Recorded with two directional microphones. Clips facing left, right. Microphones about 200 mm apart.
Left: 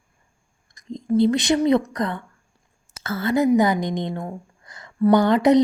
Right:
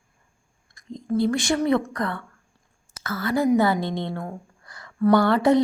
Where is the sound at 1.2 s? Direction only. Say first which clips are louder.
Left 4 dB; 20° left (ahead or behind).